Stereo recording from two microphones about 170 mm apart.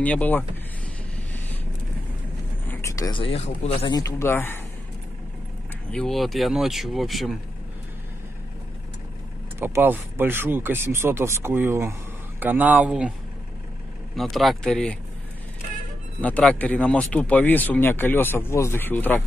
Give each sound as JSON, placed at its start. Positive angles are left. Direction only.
{"t": 0.0, "sound": "speech", "side_deg": 10}
{"t": 2.6, "sound": "speech", "side_deg": 15}
{"t": 4.0, "sound": "speech", "side_deg": 15}
{"t": 5.9, "sound": "speech", "side_deg": 5}
{"t": 9.6, "sound": "speech", "side_deg": -10}
{"t": 14.1, "sound": "speech", "side_deg": 0}
{"t": 16.2, "sound": "speech", "side_deg": 10}